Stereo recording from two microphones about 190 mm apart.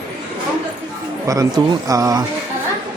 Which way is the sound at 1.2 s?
15° right (ahead or behind).